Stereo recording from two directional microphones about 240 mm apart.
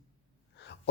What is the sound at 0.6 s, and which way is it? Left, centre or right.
Gasp, left.